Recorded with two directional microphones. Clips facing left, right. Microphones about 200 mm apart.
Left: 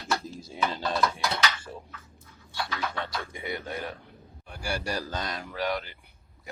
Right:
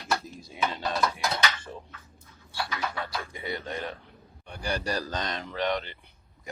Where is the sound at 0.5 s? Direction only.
30° left (ahead or behind).